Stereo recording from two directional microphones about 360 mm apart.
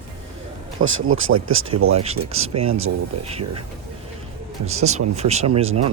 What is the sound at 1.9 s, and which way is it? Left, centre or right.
Speech, centre.